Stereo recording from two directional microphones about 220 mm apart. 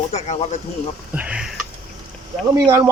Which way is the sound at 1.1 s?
5° right (ahead or behind).